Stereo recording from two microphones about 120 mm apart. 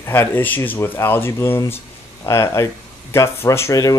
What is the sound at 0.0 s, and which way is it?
Speech, 20° left (ahead or behind).